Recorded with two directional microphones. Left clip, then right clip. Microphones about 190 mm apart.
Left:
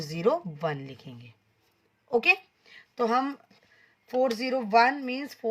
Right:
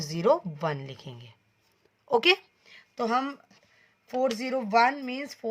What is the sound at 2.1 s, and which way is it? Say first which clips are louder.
Speech: right 1 dB; 45° right (ahead or behind).